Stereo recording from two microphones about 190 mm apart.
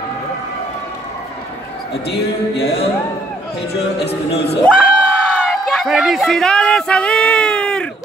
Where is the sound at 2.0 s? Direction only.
60° left (ahead or behind).